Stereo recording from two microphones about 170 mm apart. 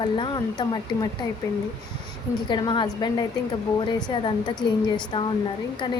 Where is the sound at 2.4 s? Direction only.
25° left (ahead or behind).